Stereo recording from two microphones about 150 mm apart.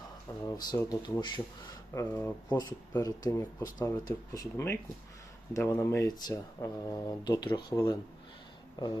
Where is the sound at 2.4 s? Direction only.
25° left (ahead or behind).